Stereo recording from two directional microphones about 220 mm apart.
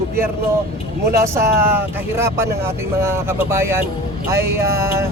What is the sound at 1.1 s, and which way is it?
Speech, 15° right (ahead or behind).